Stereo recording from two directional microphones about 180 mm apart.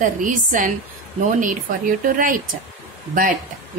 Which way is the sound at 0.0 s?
45° right (ahead or behind).